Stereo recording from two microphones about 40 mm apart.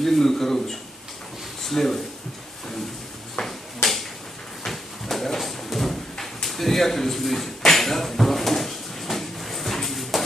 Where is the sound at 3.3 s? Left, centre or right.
Centre.